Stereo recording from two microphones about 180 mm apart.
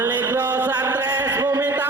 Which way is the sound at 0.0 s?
10° right (ahead or behind).